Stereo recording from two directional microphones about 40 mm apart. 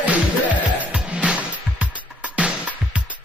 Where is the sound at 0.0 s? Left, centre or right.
Right.